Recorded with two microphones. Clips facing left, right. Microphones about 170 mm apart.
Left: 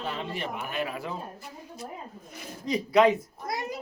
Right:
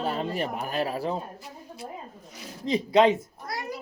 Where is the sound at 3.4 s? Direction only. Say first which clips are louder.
Left 1 dB; 20° left (ahead or behind).